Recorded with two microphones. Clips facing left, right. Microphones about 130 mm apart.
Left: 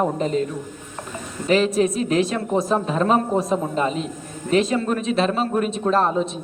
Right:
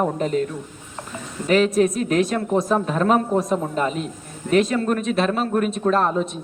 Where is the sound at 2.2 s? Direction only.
Centre (ahead or behind).